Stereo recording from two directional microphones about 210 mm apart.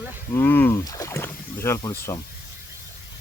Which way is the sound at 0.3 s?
10° left (ahead or behind).